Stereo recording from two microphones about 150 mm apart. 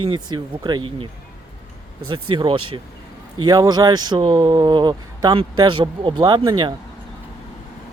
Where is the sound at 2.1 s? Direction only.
35° right (ahead or behind).